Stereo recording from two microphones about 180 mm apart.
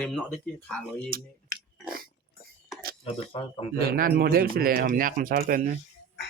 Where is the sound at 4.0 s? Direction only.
55° right (ahead or behind).